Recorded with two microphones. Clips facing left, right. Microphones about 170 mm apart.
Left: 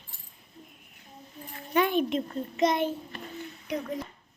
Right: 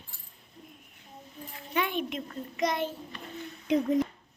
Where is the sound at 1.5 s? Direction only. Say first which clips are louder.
Left 6 dB; 45° left (ahead or behind); by 2.9 s 20° left (ahead or behind).